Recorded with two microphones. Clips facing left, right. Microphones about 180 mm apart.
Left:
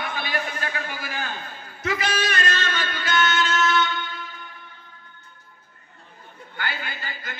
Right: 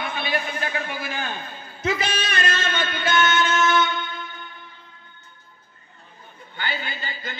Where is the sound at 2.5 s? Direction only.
25° right (ahead or behind).